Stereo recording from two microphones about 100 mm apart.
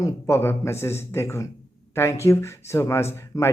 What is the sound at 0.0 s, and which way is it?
Speech, 30° left (ahead or behind).